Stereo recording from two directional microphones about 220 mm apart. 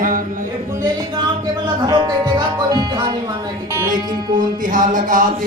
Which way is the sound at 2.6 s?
20° right (ahead or behind).